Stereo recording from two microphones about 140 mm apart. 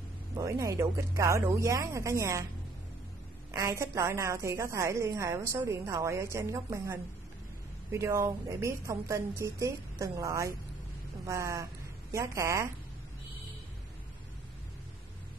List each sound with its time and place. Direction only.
0.4 s a woman's voice: 20° right (ahead or behind)
3.5 s a woman's voice: 25° right (ahead or behind)